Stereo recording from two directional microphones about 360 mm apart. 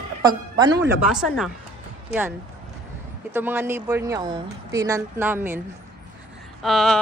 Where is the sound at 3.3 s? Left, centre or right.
Centre.